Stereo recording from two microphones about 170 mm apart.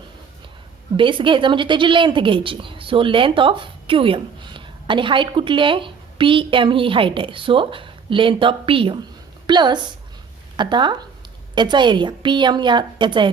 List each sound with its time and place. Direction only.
0.9 s a woman's voice: 30° right (ahead or behind)